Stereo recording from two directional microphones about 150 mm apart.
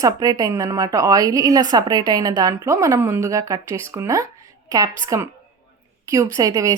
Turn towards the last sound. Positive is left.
turn(degrees=-20)  # may be behind; listen again after turning